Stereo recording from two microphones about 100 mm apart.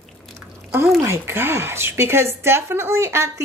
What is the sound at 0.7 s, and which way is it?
Speech, 25° right (ahead or behind).